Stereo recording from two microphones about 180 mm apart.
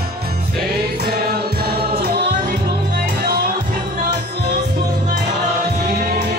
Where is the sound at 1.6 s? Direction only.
60° right (ahead or behind).